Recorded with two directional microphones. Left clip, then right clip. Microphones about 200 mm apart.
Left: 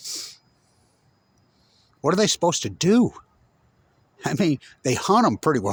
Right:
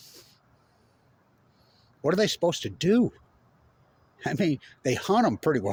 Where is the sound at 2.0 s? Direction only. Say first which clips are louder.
Left 4 dB; 50° left (ahead or behind).